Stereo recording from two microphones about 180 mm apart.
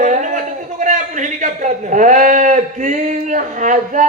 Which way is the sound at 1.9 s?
45° right (ahead or behind).